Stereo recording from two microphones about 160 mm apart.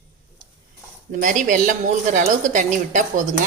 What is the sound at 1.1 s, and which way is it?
A woman's voice, 55° right (ahead or behind).